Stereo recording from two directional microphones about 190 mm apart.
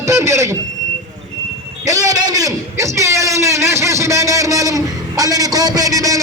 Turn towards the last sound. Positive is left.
turn(degrees=-15)  # may be behind; listen again after turning